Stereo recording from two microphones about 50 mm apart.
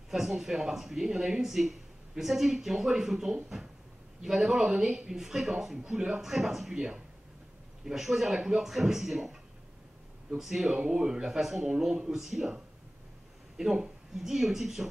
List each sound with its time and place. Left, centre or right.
0.1 s speech: centre
5.9 s a man's voice: centre
6.2 s speech: centre
6.7 s speech: centre
10.7 s speech: centre
13.6 s speech: centre